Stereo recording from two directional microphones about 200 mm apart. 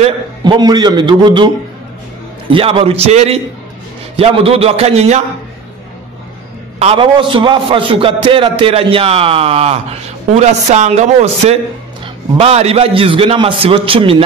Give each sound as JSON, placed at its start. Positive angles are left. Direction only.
{"t": 0.0, "sound": "a man's voice", "side_deg": -20}
{"t": 2.5, "sound": "a man's voice", "side_deg": -25}
{"t": 6.8, "sound": "a man's voice", "side_deg": -30}